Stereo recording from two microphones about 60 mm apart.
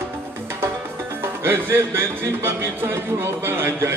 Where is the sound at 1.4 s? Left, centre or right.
Right.